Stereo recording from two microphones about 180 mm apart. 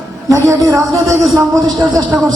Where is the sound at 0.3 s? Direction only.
15° right (ahead or behind).